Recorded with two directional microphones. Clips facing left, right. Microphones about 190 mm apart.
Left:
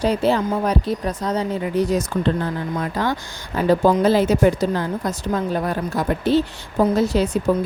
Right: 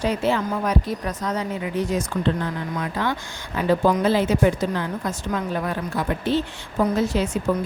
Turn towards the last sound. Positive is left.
turn(degrees=35)  # may be behind; listen again after turning